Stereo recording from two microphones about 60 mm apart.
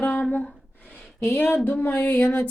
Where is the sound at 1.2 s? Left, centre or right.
Left.